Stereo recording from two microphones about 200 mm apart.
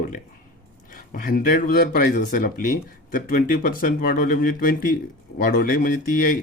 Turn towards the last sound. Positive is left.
turn(degrees=45)  # may be behind; listen again after turning